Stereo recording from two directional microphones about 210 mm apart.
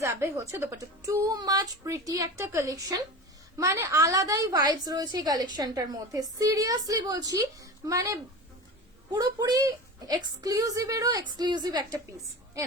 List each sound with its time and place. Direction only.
0.0 s a woman's voice: 15° right (ahead or behind)